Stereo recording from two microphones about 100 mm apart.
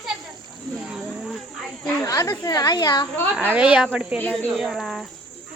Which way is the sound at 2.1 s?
40° left (ahead or behind).